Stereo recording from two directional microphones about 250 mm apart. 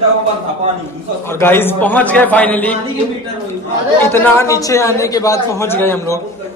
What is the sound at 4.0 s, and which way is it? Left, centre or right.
A man's voice, centre.